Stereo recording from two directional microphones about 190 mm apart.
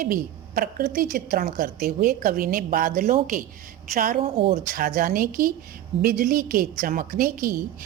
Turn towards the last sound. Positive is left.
turn(degrees=-50)  # may be behind; listen again after turning